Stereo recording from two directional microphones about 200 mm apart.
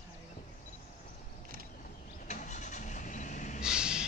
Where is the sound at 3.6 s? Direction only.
5° right (ahead or behind).